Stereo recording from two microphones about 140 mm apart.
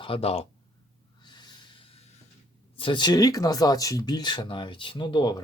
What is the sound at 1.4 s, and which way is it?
Snort, 30° left (ahead or behind).